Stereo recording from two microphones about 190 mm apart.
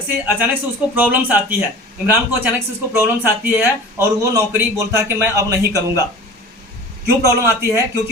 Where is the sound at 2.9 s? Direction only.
10° right (ahead or behind).